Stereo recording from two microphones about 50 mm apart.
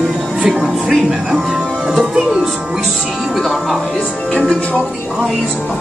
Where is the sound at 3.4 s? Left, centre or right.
Centre.